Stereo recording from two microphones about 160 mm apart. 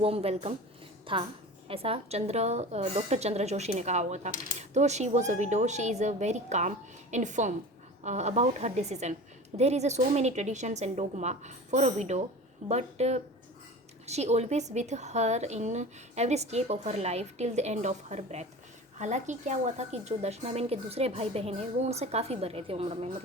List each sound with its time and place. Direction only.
0.0 s a woman's voice: 40° right (ahead or behind)